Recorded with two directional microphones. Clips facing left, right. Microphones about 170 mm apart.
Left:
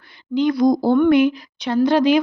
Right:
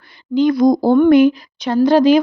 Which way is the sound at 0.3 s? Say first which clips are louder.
Right 3 dB; 45° right (ahead or behind).